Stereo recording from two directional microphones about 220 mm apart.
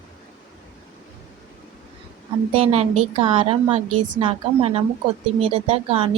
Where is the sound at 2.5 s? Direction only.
25° right (ahead or behind).